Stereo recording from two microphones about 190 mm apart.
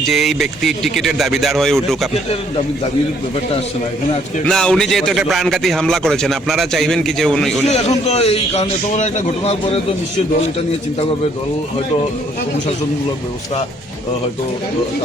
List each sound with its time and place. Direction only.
0.0 s a man's voice: centre (ahead or behind)
4.4 s a man's voice: 5° left (ahead or behind)
7.7 s a man's voice: 35° left (ahead or behind)